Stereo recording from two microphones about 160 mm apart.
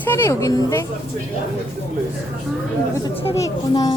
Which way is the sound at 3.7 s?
25° left (ahead or behind).